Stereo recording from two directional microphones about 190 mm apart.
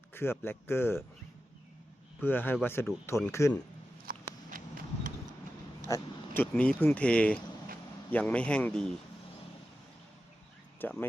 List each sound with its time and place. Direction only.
0.1 s speech: 10° left (ahead or behind)
2.2 s speech: 10° left (ahead or behind)
4.0 s a sound: 50° right (ahead or behind)
5.9 s a sound: 10° left (ahead or behind)
6.5 s speech: 5° left (ahead or behind)
10.8 s speech: 10° left (ahead or behind)